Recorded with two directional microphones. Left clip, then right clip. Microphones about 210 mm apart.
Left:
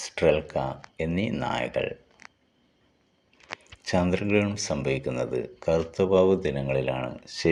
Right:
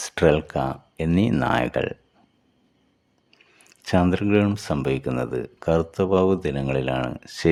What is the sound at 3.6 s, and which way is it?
Speech, 40° right (ahead or behind).